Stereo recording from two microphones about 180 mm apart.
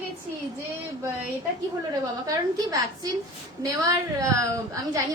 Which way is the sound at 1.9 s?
20° right (ahead or behind).